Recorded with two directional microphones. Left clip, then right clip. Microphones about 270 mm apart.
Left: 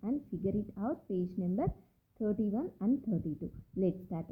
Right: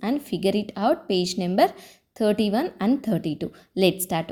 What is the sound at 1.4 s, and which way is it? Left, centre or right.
A woman's voice, right.